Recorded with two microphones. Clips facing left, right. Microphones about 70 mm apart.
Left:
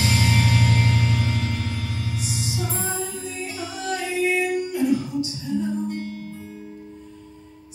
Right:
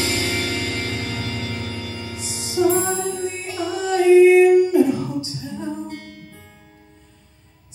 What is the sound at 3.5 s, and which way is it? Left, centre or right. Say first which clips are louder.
Music: right 8 dB; right.